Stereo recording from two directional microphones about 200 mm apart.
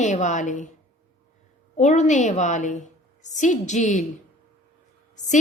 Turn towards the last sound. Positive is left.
turn(degrees=35)  # may be behind; listen again after turning